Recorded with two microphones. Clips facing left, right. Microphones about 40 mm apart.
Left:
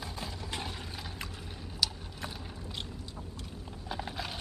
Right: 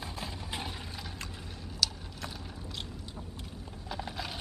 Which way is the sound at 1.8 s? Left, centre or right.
Centre.